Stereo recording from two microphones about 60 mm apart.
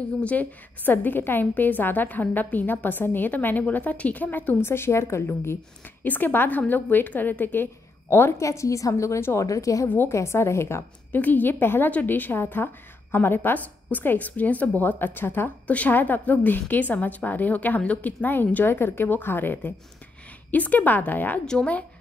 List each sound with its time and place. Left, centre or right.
0.2 s a woman's voice: left
6.0 s a woman's voice: left
8.4 s a woman's voice: left
9.8 s a woman's voice: left
10.1 s a woman's voice: left
11.1 s a woman's voice: left
15.6 s a woman's voice: left
21.5 s speech: centre